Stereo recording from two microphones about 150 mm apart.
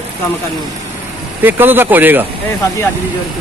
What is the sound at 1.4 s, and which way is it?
Speech, 15° right (ahead or behind).